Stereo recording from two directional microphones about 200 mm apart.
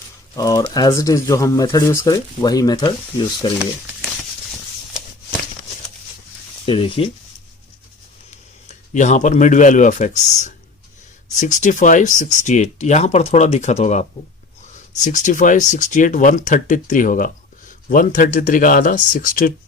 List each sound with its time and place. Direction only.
0.3 s speech: 20° left (ahead or behind)
6.7 s speech: 25° left (ahead or behind)
8.3 s speech: 35° left (ahead or behind)